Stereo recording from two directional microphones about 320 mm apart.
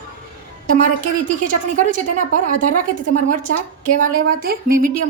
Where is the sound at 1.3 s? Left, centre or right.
Right.